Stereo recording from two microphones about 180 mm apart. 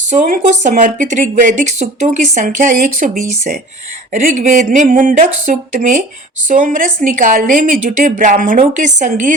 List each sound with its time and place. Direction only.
0.1 s speech: 45° right (ahead or behind)